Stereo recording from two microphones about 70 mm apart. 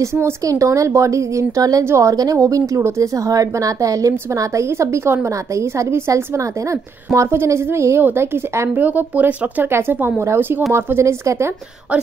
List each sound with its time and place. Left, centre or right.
0.0 s speech: right
0.4 s a woman's voice: right